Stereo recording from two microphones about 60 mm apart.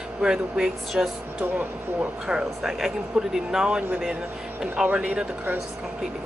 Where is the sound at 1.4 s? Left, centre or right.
Right.